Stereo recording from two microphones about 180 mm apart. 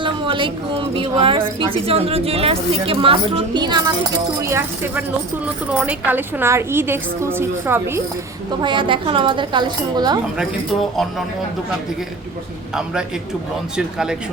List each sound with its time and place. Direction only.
0.0 s a woman's voice: 30° right (ahead or behind)
4.4 s a woman's voice: 15° right (ahead or behind)
8.6 s a woman's voice: 25° right (ahead or behind)
12.7 s speech: 5° right (ahead or behind)